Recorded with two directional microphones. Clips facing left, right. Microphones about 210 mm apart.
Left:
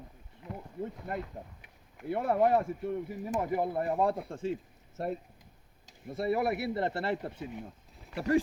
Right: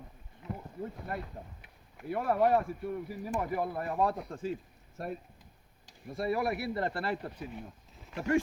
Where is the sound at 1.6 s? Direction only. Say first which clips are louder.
Left 4 dB; 25° left (ahead or behind).